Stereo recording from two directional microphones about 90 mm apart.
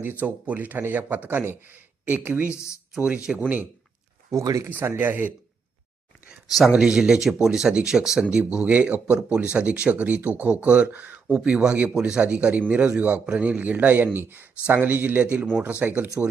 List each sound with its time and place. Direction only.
0.0 s speech: 20° right (ahead or behind)
2.5 s speech: 35° left (ahead or behind)
3.3 s speech: 5° right (ahead or behind)
4.3 s speech: 35° right (ahead or behind)
4.7 s speech: 20° right (ahead or behind)
6.7 s speech: 10° right (ahead or behind)